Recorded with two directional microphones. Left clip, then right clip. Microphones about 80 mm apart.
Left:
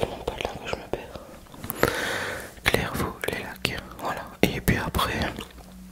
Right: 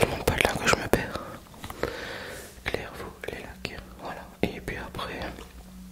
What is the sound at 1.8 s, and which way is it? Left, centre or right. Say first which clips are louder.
Whispering: left 9 dB; left.